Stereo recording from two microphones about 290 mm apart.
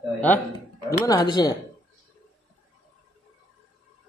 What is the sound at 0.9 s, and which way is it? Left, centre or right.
Speech, centre.